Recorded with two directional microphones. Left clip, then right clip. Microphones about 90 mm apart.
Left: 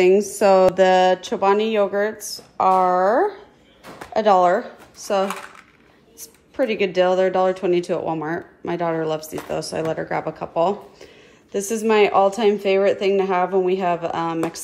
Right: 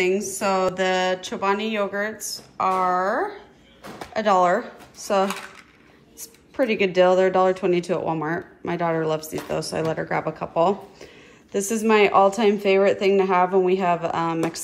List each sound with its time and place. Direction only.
0.8 s speech: 90° left
4.1 s speech: 60° left (ahead or behind)
4.4 s a woman's voice: 40° left (ahead or behind)